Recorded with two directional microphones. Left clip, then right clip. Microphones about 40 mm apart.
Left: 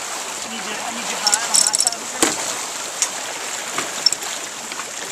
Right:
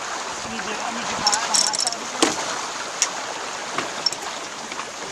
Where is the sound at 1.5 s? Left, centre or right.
Right.